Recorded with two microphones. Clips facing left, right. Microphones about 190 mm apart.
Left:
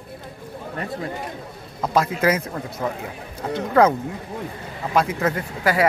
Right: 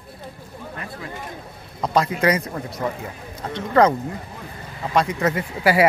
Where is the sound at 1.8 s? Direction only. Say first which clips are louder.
Even; 5° left (ahead or behind).